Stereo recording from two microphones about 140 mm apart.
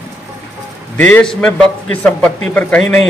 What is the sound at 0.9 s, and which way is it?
A man's voice, 10° left (ahead or behind).